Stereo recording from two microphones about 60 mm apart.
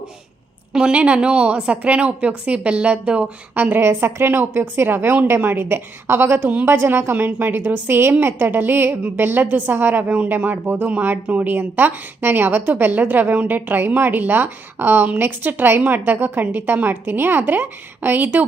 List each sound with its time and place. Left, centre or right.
0.7 s a woman's voice: centre
3.5 s a woman's voice: right